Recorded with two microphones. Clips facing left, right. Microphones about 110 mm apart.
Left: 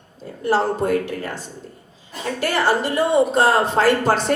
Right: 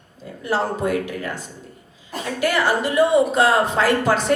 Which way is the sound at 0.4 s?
35° left (ahead or behind).